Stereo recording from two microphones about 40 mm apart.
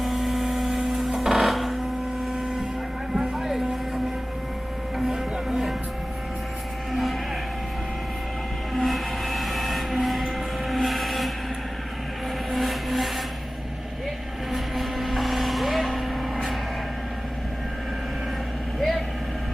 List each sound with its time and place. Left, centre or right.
0.0 s a sound: centre
3.3 s a sound: centre
4.9 s music: centre
6.9 s cattle: centre
8.7 s train: centre
12.5 s vehicle: centre
14.5 s vehicle: centre
18.8 s vehicle: centre